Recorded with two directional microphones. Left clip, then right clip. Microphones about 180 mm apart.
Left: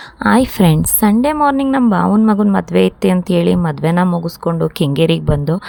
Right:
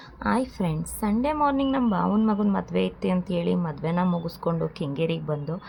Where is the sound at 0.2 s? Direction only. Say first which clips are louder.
Left 13 dB; 55° left (ahead or behind).